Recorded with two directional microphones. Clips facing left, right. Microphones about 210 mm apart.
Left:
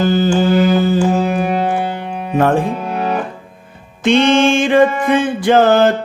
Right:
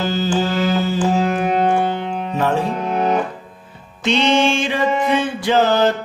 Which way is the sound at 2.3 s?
50° left (ahead or behind).